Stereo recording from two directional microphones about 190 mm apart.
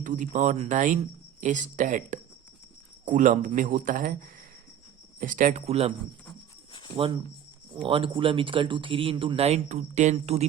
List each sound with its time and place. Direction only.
0.0 s a man's voice: 40° right (ahead or behind)
7.9 s speech: 30° right (ahead or behind)